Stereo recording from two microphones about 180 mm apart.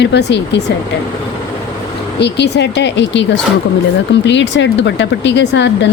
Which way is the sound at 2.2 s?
70° left (ahead or behind).